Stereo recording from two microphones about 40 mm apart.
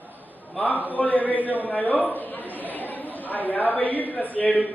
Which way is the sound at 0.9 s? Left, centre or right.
Left.